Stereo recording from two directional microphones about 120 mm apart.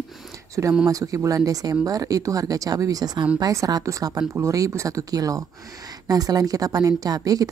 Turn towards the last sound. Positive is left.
turn(degrees=-30)  # may be behind; listen again after turning